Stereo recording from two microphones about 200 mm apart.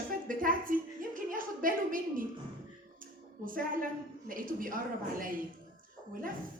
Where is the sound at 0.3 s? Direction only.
45° right (ahead or behind).